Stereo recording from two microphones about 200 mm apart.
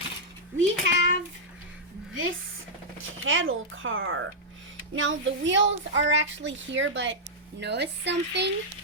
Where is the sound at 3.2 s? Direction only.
80° right; by 8.5 s 60° right (ahead or behind).